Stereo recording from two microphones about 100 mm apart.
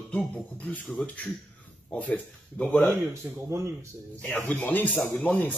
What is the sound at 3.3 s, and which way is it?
Speech, 5° right (ahead or behind).